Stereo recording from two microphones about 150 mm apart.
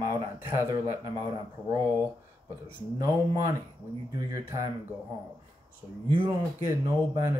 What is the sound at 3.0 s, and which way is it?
A man's voice, 20° right (ahead or behind).